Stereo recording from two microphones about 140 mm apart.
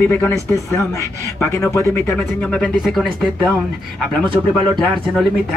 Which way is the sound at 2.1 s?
5° left (ahead or behind).